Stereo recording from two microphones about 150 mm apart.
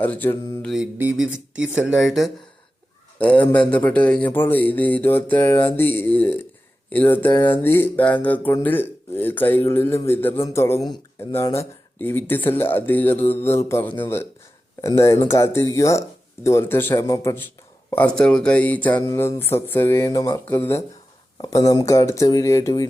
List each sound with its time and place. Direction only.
0.0 s speech: 10° left (ahead or behind)
0.6 s speech: centre (ahead or behind); by 17.4 s 20° left (ahead or behind)
17.9 s speech: 5° left (ahead or behind)